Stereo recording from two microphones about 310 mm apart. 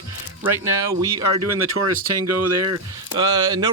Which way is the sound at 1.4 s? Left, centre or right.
Right.